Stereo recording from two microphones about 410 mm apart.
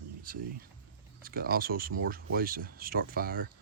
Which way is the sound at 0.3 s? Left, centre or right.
Centre.